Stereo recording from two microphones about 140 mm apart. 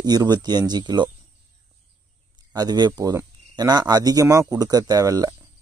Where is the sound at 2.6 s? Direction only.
30° right (ahead or behind).